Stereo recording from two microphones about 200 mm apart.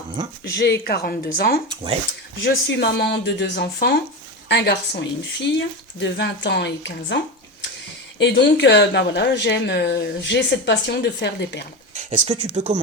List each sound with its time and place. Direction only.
0.5 s speech: 55° left (ahead or behind)
1.7 s speech: 25° right (ahead or behind)
2.4 s a woman's voice: 55° left (ahead or behind)
8.2 s a woman's voice: 60° left (ahead or behind)
11.9 s speech: 35° right (ahead or behind)